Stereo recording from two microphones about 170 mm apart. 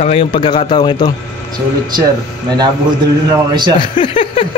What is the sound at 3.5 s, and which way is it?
Speech, 25° right (ahead or behind).